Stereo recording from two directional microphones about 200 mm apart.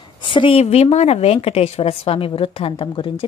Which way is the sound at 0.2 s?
25° left (ahead or behind).